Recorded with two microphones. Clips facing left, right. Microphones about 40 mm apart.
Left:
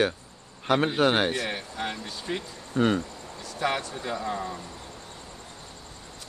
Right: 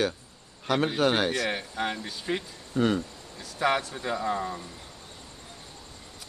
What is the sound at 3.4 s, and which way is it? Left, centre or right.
Speech, centre.